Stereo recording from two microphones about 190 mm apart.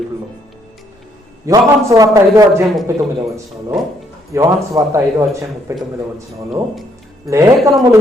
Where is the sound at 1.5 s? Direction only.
15° right (ahead or behind).